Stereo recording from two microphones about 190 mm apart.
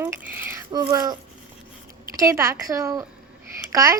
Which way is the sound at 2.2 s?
15° right (ahead or behind).